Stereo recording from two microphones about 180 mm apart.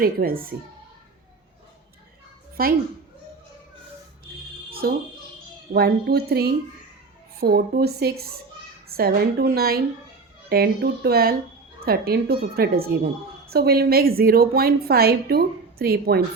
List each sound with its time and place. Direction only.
0.0 s a woman's voice: 55° right (ahead or behind)
2.6 s a woman's voice: 55° right (ahead or behind)
4.7 s music: 55° right (ahead or behind)
5.7 s a woman's voice: 60° right (ahead or behind)